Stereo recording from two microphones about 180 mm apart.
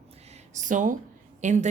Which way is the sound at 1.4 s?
45° right (ahead or behind).